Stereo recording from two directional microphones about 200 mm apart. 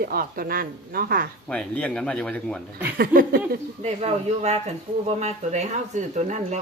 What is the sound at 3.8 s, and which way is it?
Speech, 30° right (ahead or behind).